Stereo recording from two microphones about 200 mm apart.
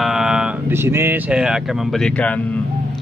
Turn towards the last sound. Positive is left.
turn(degrees=5)  # may be behind; listen again after turning